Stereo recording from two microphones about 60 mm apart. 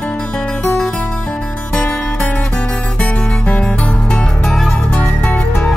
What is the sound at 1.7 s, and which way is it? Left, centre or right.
Music, left.